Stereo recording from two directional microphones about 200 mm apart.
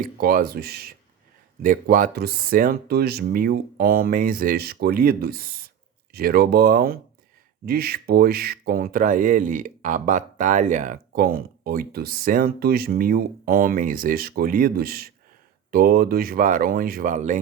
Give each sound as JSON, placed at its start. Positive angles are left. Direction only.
{"t": 0.0, "sound": "speech", "side_deg": -45}